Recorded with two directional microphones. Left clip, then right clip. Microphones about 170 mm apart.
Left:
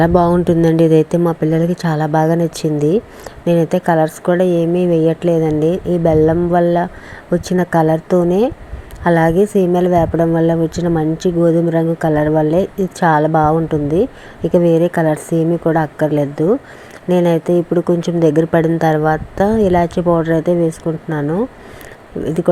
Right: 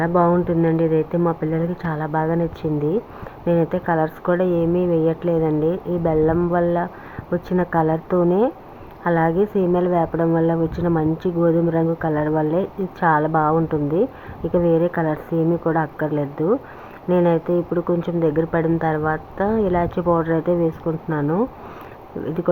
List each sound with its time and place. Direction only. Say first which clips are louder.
0.0 s speech: left 5 dB; 50° left (ahead or behind)
1.2 s speech: left 6 dB; 40° left (ahead or behind)
18.0 s speech: left 7 dB; 50° left (ahead or behind)
18.6 s speech: left 6 dB; 35° left (ahead or behind)